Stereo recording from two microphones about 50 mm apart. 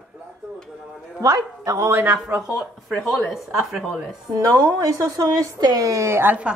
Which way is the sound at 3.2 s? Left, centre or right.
Centre.